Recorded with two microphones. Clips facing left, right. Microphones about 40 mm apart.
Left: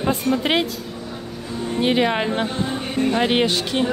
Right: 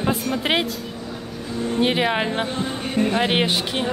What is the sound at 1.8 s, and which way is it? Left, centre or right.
A woman's voice, centre.